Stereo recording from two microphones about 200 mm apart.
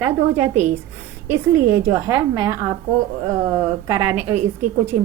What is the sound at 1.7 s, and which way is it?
Speech, 15° right (ahead or behind).